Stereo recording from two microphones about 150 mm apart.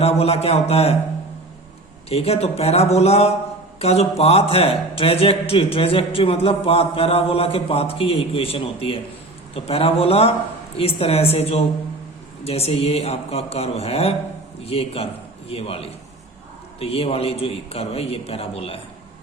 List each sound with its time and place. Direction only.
0.0 s speech: 45° left (ahead or behind)
2.0 s a man's voice: 40° left (ahead or behind)